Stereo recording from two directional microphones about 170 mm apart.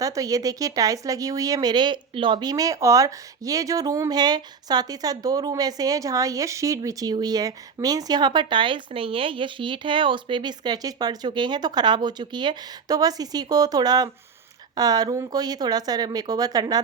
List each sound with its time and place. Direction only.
0.0 s speech: 20° right (ahead or behind)